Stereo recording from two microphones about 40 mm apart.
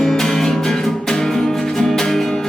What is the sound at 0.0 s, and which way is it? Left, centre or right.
Music, centre.